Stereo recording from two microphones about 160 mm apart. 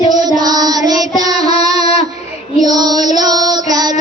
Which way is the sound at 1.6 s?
40° left (ahead or behind).